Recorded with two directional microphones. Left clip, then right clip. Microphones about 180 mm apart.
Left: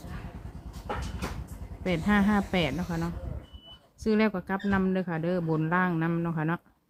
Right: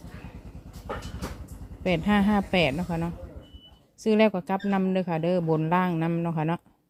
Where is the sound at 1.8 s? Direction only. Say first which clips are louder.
Right 2 dB; 20° right (ahead or behind).